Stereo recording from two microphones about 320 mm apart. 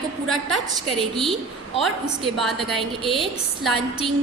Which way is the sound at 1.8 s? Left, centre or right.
Centre.